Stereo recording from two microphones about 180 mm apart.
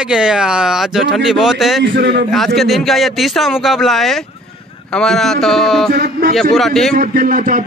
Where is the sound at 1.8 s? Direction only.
70° right (ahead or behind).